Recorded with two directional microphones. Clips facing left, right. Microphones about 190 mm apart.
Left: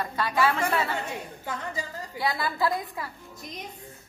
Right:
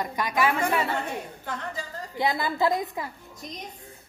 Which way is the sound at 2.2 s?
20° right (ahead or behind).